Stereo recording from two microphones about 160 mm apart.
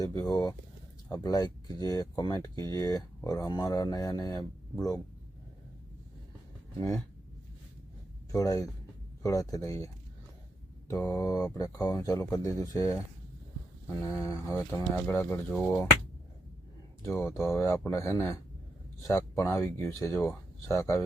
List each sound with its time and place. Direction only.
0.0 s speech: 25° left (ahead or behind)
6.7 s speech: 20° left (ahead or behind)
8.3 s speech: 20° left (ahead or behind)
11.0 s speech: 20° left (ahead or behind)
17.0 s speech: 15° left (ahead or behind)